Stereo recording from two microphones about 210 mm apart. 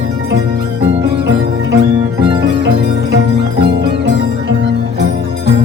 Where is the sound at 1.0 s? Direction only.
60° right (ahead or behind).